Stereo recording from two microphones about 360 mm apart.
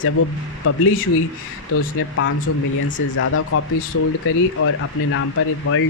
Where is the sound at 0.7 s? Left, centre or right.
Left.